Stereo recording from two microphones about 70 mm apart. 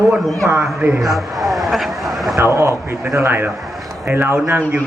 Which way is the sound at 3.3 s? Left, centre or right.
Right.